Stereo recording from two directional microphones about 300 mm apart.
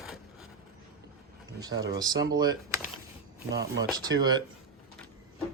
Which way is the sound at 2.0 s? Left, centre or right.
Centre.